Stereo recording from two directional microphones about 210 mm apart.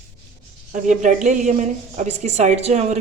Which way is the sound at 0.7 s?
35° right (ahead or behind).